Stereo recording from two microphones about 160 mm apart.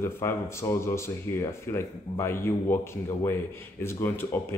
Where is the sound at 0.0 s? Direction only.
15° left (ahead or behind).